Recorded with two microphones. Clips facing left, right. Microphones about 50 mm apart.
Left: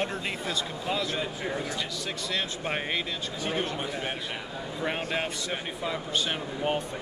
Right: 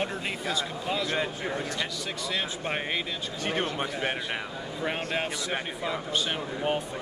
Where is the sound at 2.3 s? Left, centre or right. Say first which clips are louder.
Even; centre.